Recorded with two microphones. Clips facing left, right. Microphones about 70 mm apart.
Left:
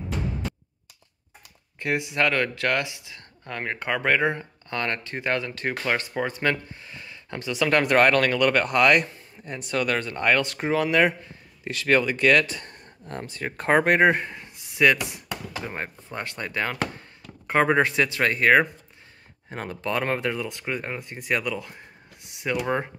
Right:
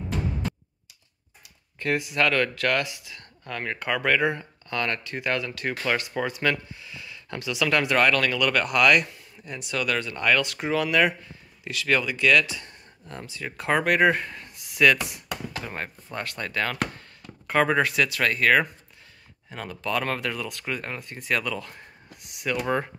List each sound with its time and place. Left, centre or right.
1.8 s speech: left
19.5 s speech: left
22.6 s speech: centre